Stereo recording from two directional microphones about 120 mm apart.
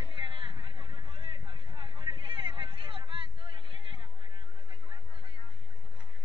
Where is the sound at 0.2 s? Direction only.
45° right (ahead or behind).